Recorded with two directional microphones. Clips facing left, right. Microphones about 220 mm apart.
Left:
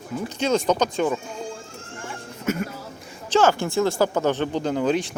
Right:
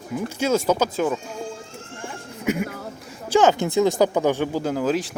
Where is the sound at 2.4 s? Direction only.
15° right (ahead or behind).